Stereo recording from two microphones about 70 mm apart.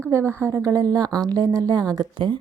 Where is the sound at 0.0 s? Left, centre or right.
Right.